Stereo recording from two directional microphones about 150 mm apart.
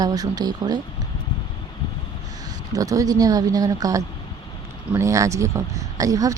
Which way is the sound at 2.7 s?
25° right (ahead or behind).